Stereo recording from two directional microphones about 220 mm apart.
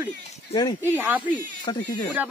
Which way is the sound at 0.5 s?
20° left (ahead or behind).